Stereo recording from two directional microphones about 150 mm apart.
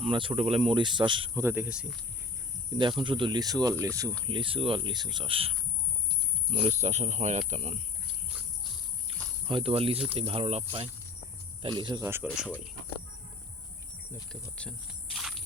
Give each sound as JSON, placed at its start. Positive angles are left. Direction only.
{"t": 0.0, "sound": "speech", "side_deg": -35}
{"t": 1.4, "sound": "speech", "side_deg": -15}
{"t": 3.0, "sound": "speech", "side_deg": -30}
{"t": 4.3, "sound": "speech", "side_deg": -35}
{"t": 9.1, "sound": "cricket", "side_deg": -40}
{"t": 9.5, "sound": "speech", "side_deg": -35}
{"t": 12.0, "sound": "speech", "side_deg": -15}
{"t": 14.5, "sound": "insect", "side_deg": 5}